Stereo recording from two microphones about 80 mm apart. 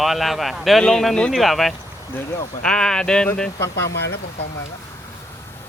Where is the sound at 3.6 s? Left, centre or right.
Left.